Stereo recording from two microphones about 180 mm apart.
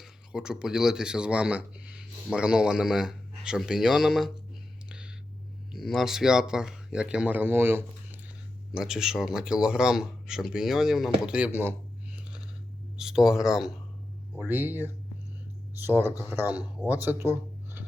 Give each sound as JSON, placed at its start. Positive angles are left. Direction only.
{"t": 0.0, "sound": "speech", "side_deg": -5}
{"t": 4.9, "sound": "a sound", "side_deg": -5}
{"t": 5.7, "sound": "speech", "side_deg": 0}
{"t": 13.0, "sound": "speech", "side_deg": -5}
{"t": 15.9, "sound": "speech", "side_deg": -10}